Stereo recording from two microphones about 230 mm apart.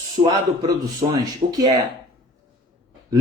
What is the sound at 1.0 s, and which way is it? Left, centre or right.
Speech, right.